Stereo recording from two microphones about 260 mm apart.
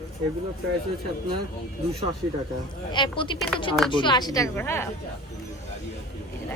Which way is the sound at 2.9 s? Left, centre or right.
Centre.